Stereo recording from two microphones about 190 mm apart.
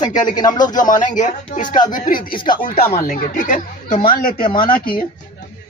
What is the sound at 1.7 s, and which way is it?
Speech, 20° left (ahead or behind).